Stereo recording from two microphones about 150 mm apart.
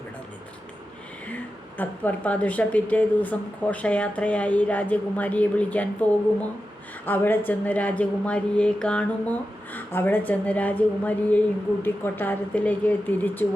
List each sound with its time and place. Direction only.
1.8 s a woman's voice: 10° left (ahead or behind)